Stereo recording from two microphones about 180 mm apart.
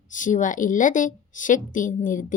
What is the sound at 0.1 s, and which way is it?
A woman's voice, 45° left (ahead or behind).